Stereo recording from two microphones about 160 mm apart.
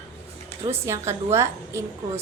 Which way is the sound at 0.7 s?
15° right (ahead or behind).